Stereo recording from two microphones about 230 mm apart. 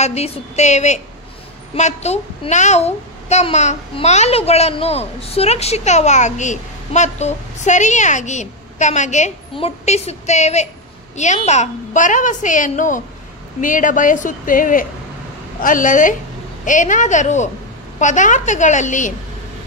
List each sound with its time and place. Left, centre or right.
0.0 s a child's voice: left